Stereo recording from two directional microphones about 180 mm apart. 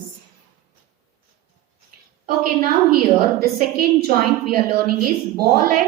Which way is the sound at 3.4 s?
55° right (ahead or behind).